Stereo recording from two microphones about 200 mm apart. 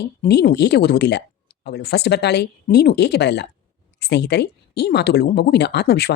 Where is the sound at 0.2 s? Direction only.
55° left (ahead or behind).